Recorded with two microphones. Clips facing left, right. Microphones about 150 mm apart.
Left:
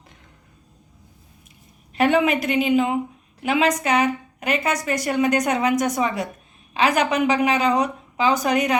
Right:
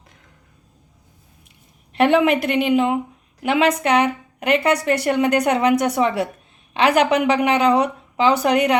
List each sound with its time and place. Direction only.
1.9 s a woman's voice: 65° right (ahead or behind)